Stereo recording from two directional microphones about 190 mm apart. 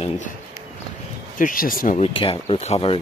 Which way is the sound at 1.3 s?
45° left (ahead or behind).